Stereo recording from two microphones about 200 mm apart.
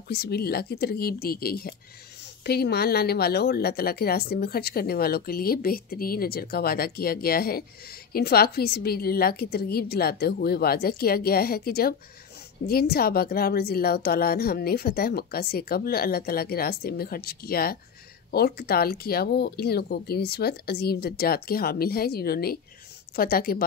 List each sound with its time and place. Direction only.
0.1 s a woman's voice: 55° left (ahead or behind)